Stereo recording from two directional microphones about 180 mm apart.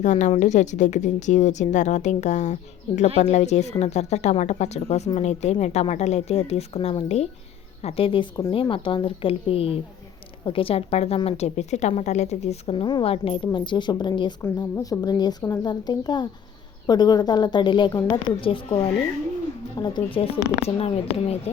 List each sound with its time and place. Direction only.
0.0 s a woman's voice: 40° left (ahead or behind)